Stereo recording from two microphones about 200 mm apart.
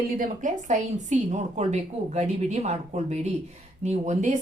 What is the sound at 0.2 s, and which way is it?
Speech, 40° right (ahead or behind).